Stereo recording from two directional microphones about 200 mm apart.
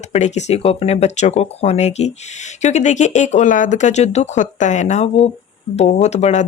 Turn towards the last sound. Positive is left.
turn(degrees=35)  # may be behind; listen again after turning